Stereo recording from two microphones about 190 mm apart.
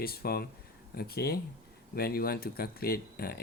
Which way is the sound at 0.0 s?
55° left (ahead or behind).